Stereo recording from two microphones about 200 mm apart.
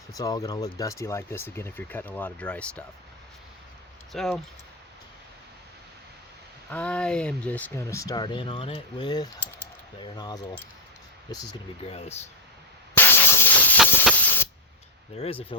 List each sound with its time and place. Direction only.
0.1 s speech: 20° left (ahead or behind)
4.1 s speech: centre (ahead or behind)
6.7 s speech: 5° left (ahead or behind)
11.9 s speech: 30° left (ahead or behind)
12.9 s hiss: 10° left (ahead or behind)
15.2 s speech: 30° left (ahead or behind)